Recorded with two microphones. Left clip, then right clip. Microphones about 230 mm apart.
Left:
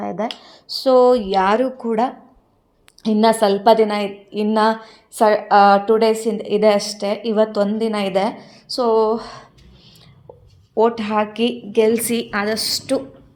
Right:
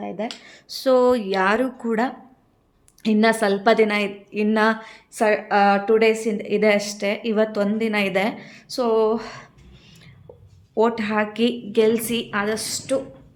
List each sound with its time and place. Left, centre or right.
0.4 s a woman's voice: centre
10.8 s a woman's voice: centre
11.9 s a woman's voice: centre